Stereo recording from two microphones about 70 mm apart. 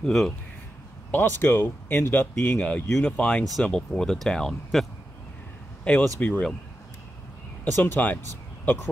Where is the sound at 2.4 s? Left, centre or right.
Centre.